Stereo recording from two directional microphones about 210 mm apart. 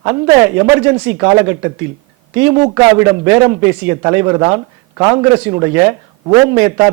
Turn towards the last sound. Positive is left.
turn(degrees=-10)  # may be behind; listen again after turning